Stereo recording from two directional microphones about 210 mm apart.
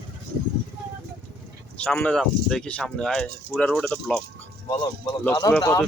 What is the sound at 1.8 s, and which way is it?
Speech, 5° left (ahead or behind).